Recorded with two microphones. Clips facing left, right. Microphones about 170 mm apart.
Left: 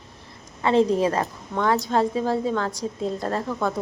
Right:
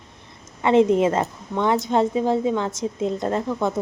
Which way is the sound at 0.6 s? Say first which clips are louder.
Right 3 dB; 20° right (ahead or behind).